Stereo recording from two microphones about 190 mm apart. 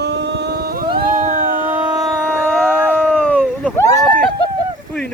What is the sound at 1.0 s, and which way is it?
Cat, 40° right (ahead or behind).